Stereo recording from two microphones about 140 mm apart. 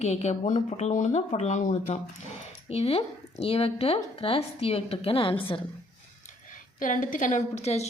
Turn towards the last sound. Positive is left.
turn(degrees=50)  # may be behind; listen again after turning